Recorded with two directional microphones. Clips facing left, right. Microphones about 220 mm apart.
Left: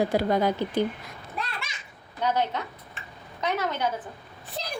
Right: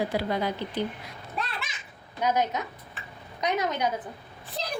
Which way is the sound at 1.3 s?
Centre (ahead or behind).